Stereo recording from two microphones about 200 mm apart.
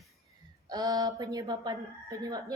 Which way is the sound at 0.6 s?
20° right (ahead or behind).